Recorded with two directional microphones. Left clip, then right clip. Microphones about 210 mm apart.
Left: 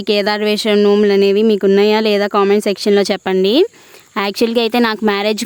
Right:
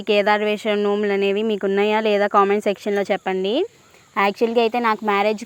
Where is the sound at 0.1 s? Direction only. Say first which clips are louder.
Left 2 dB; 35° left (ahead or behind).